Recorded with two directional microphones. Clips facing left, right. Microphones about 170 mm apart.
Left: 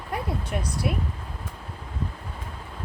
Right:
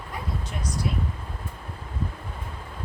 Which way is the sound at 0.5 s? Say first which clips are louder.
Left 7 dB; 60° left (ahead or behind).